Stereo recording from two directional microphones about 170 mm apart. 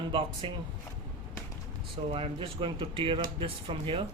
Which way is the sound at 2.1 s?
30° right (ahead or behind).